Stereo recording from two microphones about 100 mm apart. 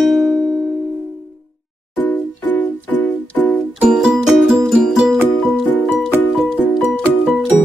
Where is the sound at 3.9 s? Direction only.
5° right (ahead or behind).